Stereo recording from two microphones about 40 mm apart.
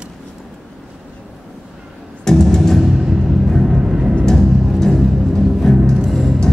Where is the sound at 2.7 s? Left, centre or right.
Centre.